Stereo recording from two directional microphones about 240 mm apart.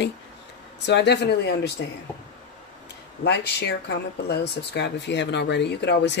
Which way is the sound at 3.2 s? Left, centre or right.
Left.